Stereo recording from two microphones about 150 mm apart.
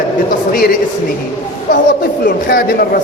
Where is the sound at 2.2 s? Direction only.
70° left (ahead or behind).